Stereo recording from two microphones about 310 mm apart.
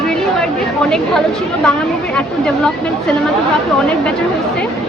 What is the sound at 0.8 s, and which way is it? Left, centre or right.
Speech, centre.